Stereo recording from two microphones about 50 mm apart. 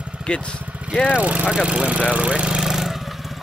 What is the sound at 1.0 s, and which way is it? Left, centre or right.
Lawn mower, right.